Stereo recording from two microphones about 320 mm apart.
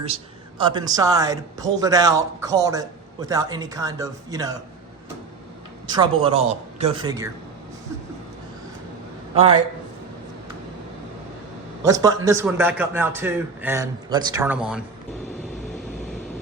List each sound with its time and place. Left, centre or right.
0.6 s a man's voice: centre
5.9 s a man's voice: centre
9.3 s a man's voice: centre
11.8 s a man's voice: centre